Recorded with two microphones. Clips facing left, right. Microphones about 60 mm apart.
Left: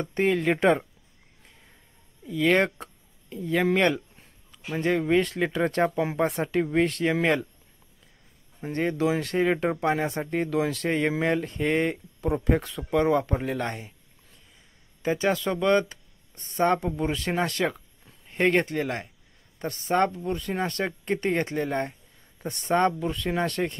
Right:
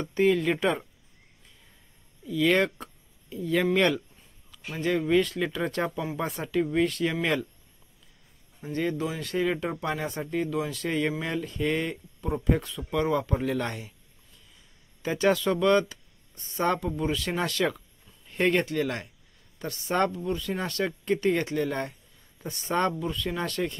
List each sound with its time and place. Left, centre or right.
0.0 s speech: left
2.2 s a sound: left
3.7 s speech: left
8.6 s speech: left
8.9 s speech: left
11.1 s speech: left
13.4 s speech: left
15.0 s speech: left
15.9 s a sound: left
16.6 s speech: left
22.4 s speech: left